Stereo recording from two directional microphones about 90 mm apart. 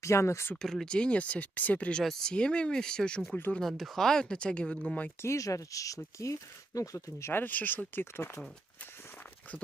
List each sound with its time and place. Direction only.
0.0 s speech: 30° left (ahead or behind)
0.6 s speech: 5° left (ahead or behind)
5.2 s speech: 35° left (ahead or behind)